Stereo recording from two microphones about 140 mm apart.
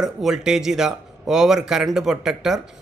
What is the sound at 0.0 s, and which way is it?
Speech, 5° right (ahead or behind).